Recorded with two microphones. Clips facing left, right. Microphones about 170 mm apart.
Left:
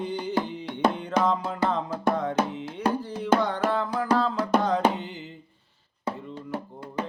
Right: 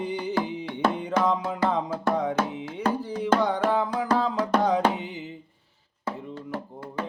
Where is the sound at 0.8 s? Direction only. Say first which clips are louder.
Left 1 dB; 15° left (ahead or behind).